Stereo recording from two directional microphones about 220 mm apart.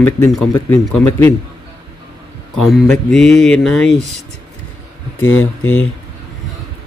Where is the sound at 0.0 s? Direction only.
5° left (ahead or behind).